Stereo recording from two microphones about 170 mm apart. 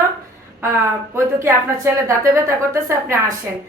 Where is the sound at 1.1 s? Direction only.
15° right (ahead or behind).